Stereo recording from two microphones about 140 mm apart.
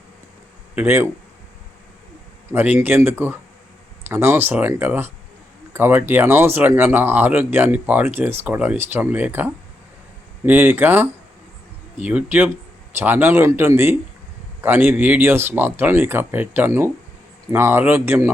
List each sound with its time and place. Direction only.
0.8 s speech: 15° right (ahead or behind)
2.5 s speech: 15° right (ahead or behind)